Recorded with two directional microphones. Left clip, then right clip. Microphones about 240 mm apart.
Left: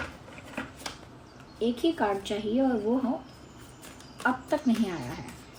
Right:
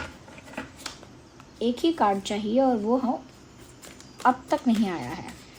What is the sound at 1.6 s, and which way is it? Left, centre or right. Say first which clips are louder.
A woman's voice: right 4 dB; right.